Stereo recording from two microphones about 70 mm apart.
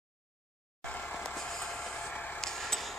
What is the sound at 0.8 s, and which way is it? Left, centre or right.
Vehicle, left.